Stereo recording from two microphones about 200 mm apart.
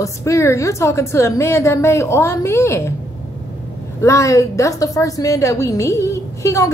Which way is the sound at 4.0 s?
15° left (ahead or behind).